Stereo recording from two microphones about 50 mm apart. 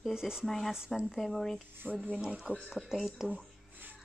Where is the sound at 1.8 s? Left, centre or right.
Right.